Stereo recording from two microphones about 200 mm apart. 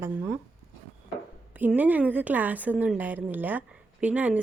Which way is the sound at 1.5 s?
10° right (ahead or behind).